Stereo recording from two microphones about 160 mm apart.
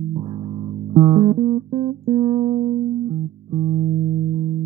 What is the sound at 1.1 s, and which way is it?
Music, 40° right (ahead or behind).